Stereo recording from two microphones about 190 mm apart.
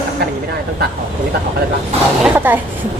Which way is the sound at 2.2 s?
10° right (ahead or behind).